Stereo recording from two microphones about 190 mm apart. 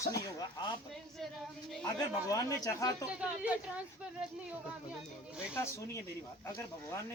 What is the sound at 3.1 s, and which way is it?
Speech, 5° right (ahead or behind).